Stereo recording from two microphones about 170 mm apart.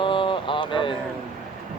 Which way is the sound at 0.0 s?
30° left (ahead or behind).